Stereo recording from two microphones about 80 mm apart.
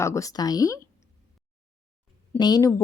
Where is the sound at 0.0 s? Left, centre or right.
Left.